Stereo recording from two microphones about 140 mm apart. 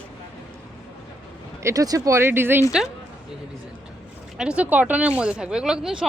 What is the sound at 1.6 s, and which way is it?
Speech, 25° right (ahead or behind).